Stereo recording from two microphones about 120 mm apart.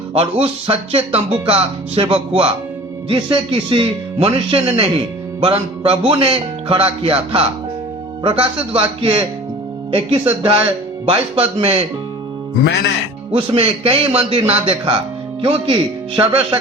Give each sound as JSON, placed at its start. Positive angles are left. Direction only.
{"t": 0.1, "sound": "speech", "side_deg": -50}
{"t": 5.4, "sound": "music", "side_deg": -45}
{"t": 6.1, "sound": "speech", "side_deg": -50}
{"t": 9.9, "sound": "speech", "side_deg": -50}
{"t": 13.3, "sound": "speech", "side_deg": -50}